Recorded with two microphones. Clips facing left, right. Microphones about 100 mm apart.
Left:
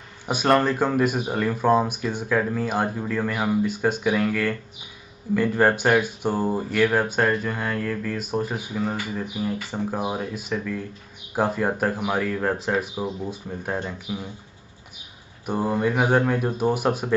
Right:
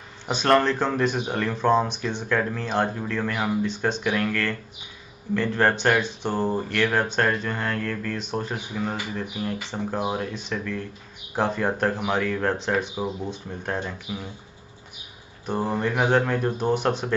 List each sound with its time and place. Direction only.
0.3 s speech: 10° left (ahead or behind)
15.4 s speech: 10° left (ahead or behind)